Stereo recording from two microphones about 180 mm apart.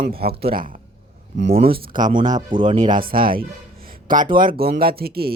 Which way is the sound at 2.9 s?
50° right (ahead or behind).